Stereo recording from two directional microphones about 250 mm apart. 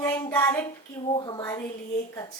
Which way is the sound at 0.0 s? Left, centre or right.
Centre.